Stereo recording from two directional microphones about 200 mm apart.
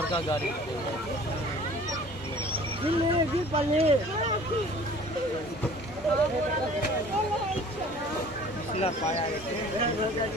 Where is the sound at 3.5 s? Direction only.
30° right (ahead or behind).